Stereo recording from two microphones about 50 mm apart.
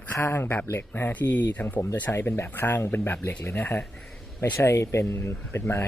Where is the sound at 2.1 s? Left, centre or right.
Left.